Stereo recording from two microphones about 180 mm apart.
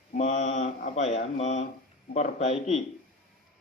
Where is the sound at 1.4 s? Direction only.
40° left (ahead or behind).